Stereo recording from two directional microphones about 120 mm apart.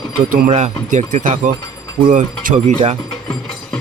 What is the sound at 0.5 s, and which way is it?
Speech, 80° right.